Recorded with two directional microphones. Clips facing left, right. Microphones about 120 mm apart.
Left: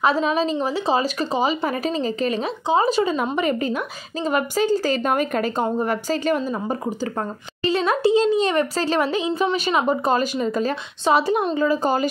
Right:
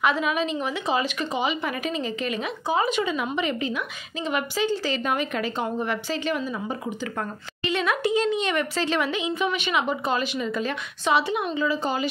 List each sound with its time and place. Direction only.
0.0 s speech: 35° left (ahead or behind)